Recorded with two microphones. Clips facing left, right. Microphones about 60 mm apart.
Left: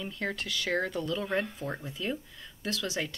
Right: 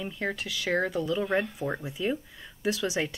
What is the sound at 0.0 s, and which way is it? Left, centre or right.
Speech, centre.